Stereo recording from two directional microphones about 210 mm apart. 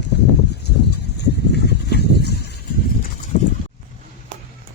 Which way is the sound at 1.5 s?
50° left (ahead or behind).